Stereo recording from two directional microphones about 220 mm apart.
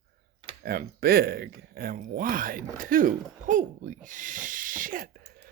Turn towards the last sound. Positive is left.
turn(degrees=-40)  # may be behind; listen again after turning